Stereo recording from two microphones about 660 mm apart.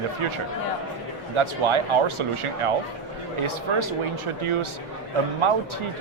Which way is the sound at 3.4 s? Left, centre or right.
Right.